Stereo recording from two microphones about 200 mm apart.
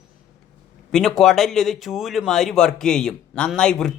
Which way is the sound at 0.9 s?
Centre (ahead or behind).